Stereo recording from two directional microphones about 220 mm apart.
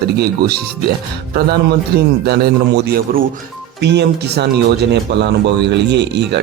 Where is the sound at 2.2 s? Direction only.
45° right (ahead or behind).